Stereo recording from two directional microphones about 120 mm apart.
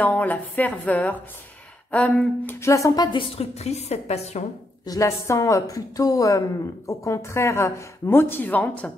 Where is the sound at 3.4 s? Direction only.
65° left (ahead or behind).